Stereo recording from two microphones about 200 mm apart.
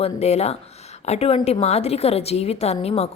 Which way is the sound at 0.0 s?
30° left (ahead or behind).